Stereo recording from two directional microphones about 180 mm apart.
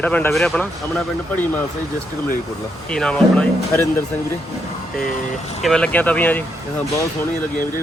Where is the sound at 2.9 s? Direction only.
5° left (ahead or behind).